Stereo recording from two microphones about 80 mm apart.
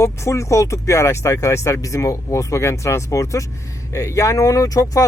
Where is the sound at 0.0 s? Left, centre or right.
Left.